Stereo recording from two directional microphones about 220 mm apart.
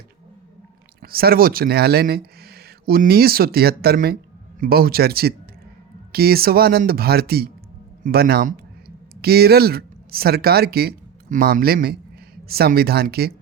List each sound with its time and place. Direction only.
1.0 s speech: 45° right (ahead or behind)